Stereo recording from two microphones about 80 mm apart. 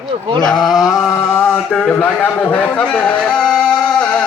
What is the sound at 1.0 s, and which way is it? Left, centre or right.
Mantra, left.